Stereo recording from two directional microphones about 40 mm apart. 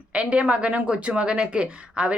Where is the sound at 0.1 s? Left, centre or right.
Right.